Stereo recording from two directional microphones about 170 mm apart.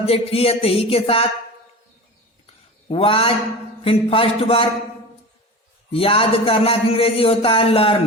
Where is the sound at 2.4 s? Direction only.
35° left (ahead or behind).